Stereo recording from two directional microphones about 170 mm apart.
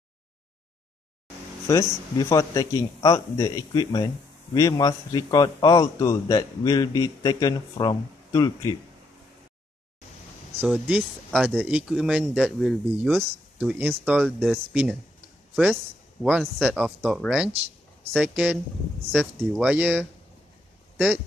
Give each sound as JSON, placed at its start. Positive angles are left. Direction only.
{"t": 1.7, "sound": "a man's voice", "side_deg": 20}
{"t": 10.6, "sound": "speech", "side_deg": -5}